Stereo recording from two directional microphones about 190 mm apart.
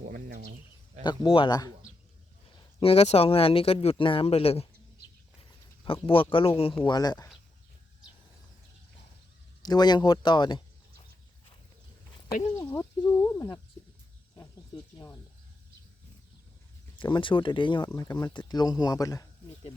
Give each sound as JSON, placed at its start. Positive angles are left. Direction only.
{"t": 0.0, "sound": "bird", "side_deg": -45}
{"t": 1.0, "sound": "speech", "side_deg": 25}
{"t": 2.8, "sound": "speech", "side_deg": 30}
{"t": 5.4, "sound": "a sound", "side_deg": 30}
{"t": 6.1, "sound": "speech", "side_deg": 30}
{"t": 9.6, "sound": "speech", "side_deg": 20}
{"t": 12.5, "sound": "speech", "side_deg": 15}
{"t": 14.9, "sound": "speech", "side_deg": 20}
{"t": 17.0, "sound": "speech", "side_deg": 25}